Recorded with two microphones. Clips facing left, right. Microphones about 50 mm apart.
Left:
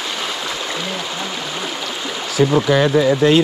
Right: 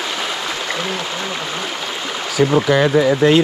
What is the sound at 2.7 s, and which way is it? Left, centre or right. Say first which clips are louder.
Speech: even; right.